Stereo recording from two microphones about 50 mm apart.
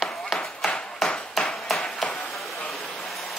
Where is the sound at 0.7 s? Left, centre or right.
Centre.